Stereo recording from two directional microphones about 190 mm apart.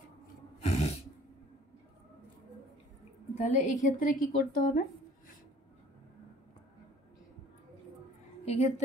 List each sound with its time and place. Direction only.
0.6 s a sound: 35° left (ahead or behind)
3.3 s a woman's voice: 40° left (ahead or behind)
8.5 s a woman's voice: 35° left (ahead or behind)